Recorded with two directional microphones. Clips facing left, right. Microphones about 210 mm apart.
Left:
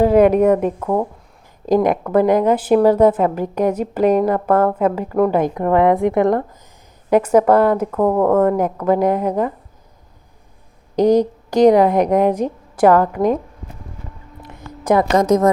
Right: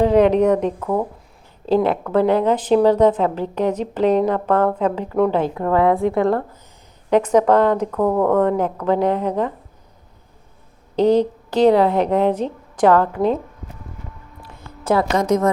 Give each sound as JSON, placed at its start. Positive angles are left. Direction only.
{"t": 0.0, "sound": "a woman's voice", "side_deg": 10}
{"t": 10.9, "sound": "a woman's voice", "side_deg": 10}
{"t": 14.4, "sound": "a sound", "side_deg": 20}
{"t": 15.1, "sound": "a woman's voice", "side_deg": 40}